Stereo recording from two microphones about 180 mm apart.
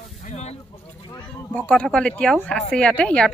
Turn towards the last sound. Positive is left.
turn(degrees=5)  # may be behind; listen again after turning